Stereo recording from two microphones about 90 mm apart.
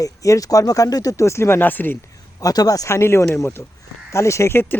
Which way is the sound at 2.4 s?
40° left (ahead or behind).